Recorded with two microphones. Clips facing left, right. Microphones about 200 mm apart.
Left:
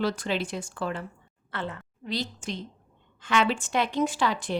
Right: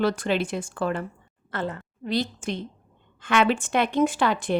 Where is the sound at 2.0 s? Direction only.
55° right (ahead or behind).